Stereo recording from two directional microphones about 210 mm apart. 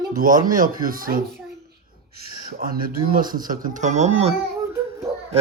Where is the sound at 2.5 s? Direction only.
45° right (ahead or behind).